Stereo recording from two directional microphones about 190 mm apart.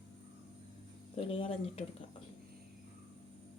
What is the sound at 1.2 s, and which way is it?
Speech, 30° left (ahead or behind).